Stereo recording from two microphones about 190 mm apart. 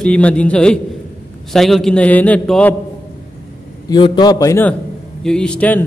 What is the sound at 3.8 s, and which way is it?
A man's voice, 25° left (ahead or behind).